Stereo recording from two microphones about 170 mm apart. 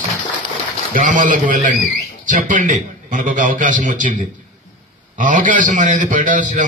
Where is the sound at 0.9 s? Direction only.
50° right (ahead or behind).